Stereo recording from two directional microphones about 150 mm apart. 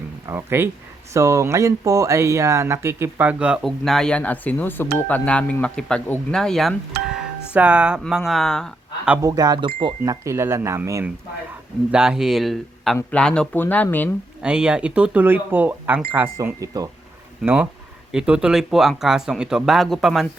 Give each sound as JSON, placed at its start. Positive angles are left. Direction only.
{"t": 0.3, "sound": "speech", "side_deg": -15}
{"t": 9.2, "sound": "speech", "side_deg": -25}
{"t": 10.0, "sound": "speech", "side_deg": -20}
{"t": 11.9, "sound": "speech", "side_deg": -5}
{"t": 14.4, "sound": "speech", "side_deg": -5}
{"t": 17.4, "sound": "speech", "side_deg": -10}